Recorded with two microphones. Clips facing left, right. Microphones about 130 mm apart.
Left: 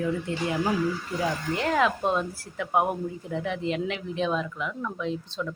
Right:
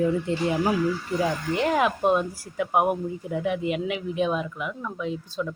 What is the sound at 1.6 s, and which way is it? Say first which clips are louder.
Speech: right 2 dB; 15° right (ahead or behind).